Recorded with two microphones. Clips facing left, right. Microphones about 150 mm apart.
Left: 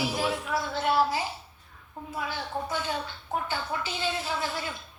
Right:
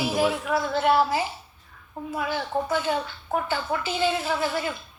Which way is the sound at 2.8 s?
70° right (ahead or behind).